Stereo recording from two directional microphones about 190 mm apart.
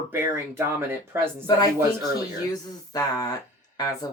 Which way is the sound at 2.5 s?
20° left (ahead or behind).